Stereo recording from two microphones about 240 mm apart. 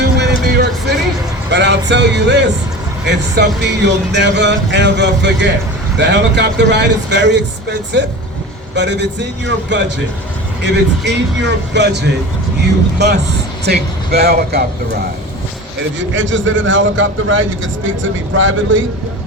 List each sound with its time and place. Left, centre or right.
0.0 s vehicle: right
1.5 s speech: right
16.0 s speech: right